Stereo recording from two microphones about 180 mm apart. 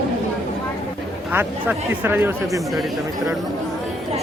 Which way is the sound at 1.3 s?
10° right (ahead or behind).